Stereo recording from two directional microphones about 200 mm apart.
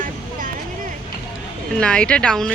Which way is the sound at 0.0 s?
45° right (ahead or behind).